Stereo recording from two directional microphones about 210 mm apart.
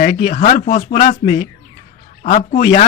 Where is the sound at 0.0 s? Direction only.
40° left (ahead or behind).